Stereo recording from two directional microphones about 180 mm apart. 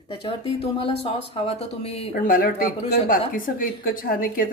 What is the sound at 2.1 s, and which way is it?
A woman's voice, 50° left (ahead or behind).